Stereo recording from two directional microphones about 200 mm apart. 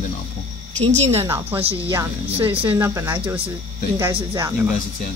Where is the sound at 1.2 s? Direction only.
15° right (ahead or behind).